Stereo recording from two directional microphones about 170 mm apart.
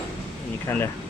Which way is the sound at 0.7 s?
10° left (ahead or behind).